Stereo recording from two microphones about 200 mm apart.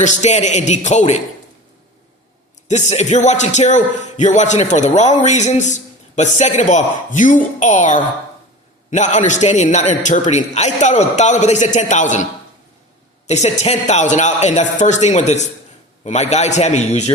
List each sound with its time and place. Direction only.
0.0 s a man's voice: 35° left (ahead or behind)
2.6 s a man's voice: 35° left (ahead or behind)